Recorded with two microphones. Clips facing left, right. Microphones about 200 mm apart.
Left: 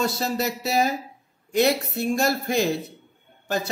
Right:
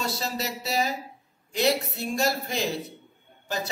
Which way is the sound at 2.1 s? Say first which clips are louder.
Left 3 dB; 50° left (ahead or behind).